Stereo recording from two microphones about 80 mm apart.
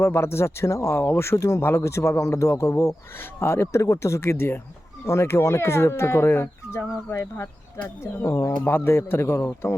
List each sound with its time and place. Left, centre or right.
0.0 s speech: left
8.6 s speech: left